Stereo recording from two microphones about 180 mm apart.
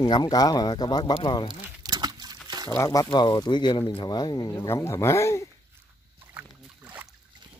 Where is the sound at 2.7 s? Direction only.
15° left (ahead or behind).